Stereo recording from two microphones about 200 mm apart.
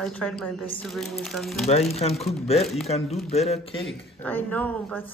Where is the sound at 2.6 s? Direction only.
Centre (ahead or behind).